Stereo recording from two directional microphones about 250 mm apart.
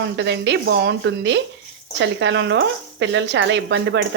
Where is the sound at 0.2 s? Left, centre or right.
Right.